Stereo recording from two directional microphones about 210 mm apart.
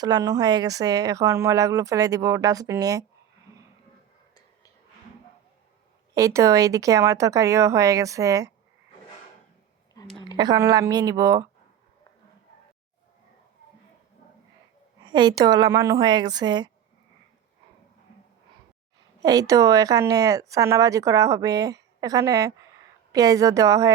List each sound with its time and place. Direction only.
0.0 s speech: 20° right (ahead or behind)
6.1 s speech: 15° right (ahead or behind)
10.0 s a sound: 20° left (ahead or behind)
10.3 s speech: 20° right (ahead or behind)
15.0 s a woman's voice: 20° right (ahead or behind)
19.2 s speech: 15° right (ahead or behind)